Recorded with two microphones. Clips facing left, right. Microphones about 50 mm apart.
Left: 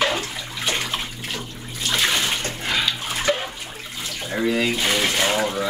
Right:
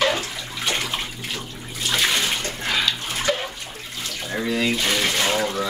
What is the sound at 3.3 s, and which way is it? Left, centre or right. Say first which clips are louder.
Water: left 1 dB; centre.